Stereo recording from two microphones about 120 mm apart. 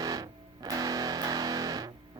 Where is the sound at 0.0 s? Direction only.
30° right (ahead or behind).